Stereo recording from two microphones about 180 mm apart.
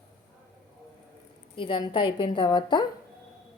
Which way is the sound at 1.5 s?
25° left (ahead or behind).